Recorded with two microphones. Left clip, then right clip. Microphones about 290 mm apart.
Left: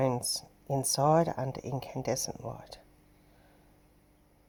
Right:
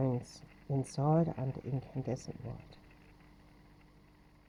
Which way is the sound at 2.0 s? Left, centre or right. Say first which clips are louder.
Left 11 dB; centre.